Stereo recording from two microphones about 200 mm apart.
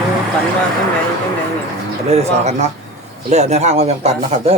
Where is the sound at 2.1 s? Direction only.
35° right (ahead or behind).